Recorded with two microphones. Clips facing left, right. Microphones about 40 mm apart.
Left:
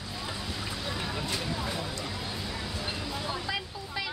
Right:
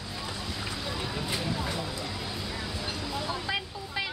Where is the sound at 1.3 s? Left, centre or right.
Centre.